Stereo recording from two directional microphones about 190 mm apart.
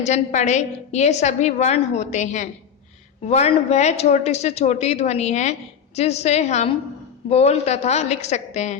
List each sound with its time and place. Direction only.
0.0 s a woman's voice: 40° left (ahead or behind)